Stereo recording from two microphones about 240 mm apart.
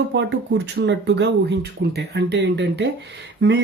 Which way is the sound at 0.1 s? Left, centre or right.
Right.